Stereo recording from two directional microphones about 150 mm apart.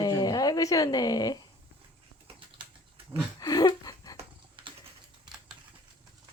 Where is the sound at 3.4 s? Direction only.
25° left (ahead or behind).